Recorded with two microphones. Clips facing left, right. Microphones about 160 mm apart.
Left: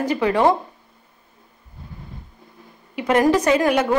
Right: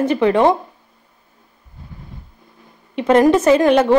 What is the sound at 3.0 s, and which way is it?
Speech, 25° right (ahead or behind).